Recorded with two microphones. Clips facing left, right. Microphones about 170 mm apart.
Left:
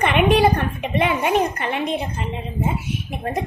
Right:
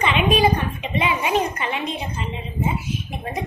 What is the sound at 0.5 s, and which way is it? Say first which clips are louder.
A woman's voice: left 2 dB; 55° left (ahead or behind).